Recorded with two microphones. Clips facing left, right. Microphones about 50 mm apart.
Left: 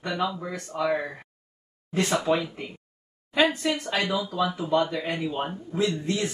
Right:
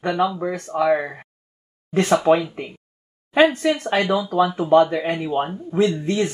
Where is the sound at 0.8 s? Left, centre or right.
Right.